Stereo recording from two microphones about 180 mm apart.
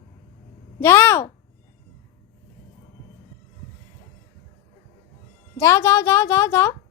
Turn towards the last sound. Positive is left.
turn(degrees=15)  # may be behind; listen again after turning